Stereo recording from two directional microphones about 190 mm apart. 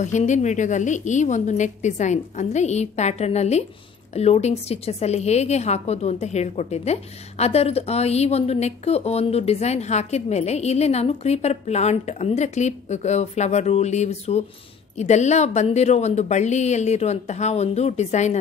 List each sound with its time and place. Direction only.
0.0 s a woman's voice: 40° left (ahead or behind)